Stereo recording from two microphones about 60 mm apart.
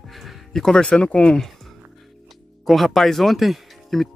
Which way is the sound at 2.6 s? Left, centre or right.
Centre.